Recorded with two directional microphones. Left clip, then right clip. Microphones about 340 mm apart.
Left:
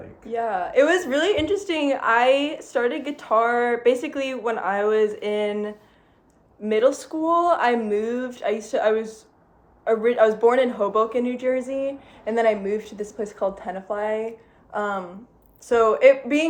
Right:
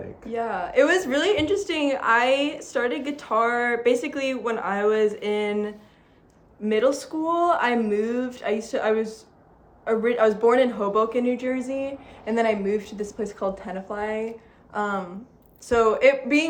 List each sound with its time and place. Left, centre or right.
0.3 s a woman's voice: centre